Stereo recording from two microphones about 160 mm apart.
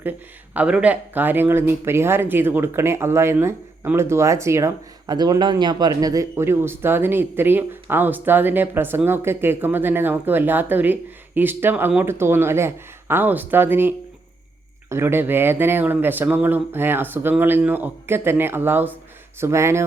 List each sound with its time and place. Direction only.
0.5 s speech: 5° right (ahead or behind)